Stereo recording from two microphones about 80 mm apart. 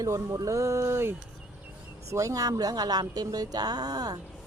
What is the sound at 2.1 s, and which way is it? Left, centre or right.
Speech, right.